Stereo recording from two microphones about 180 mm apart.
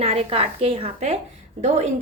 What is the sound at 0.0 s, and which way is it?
A woman's voice, 35° right (ahead or behind).